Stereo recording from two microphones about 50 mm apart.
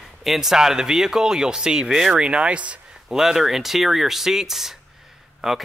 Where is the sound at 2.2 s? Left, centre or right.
Right.